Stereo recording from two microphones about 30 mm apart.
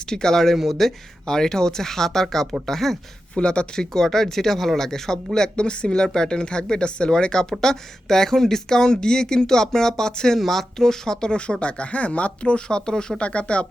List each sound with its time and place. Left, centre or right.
0.1 s speech: left
0.5 s speech: centre
1.3 s speech: centre
3.3 s speech: left
3.9 s speech: centre
5.5 s speech: left
10.3 s speech: centre
11.3 s speech: left
13.2 s speech: left